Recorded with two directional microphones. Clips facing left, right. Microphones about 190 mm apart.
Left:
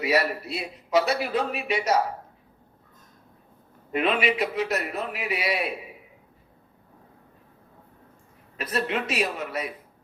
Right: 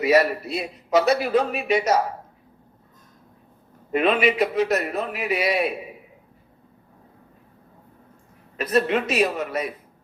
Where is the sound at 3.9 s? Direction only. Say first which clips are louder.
Right 4 dB; 45° right (ahead or behind).